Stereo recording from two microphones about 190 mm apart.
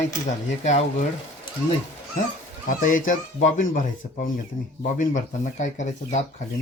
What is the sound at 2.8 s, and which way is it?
Speech, 45° left (ahead or behind).